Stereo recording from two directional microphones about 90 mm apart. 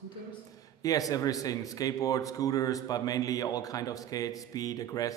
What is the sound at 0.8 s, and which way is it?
Speech, 40° left (ahead or behind).